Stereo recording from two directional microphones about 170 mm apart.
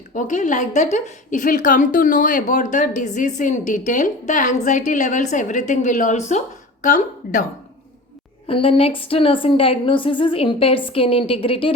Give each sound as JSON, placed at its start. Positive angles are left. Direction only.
{"t": 0.1, "sound": "a woman's voice", "side_deg": 50}
{"t": 8.4, "sound": "a woman's voice", "side_deg": 30}